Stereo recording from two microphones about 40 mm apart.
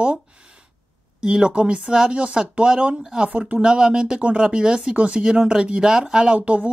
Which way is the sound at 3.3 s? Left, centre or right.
Right.